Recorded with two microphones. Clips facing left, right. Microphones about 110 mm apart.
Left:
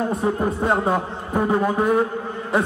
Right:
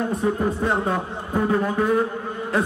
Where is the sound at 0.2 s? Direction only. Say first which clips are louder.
Left 1 dB; 25° left (ahead or behind).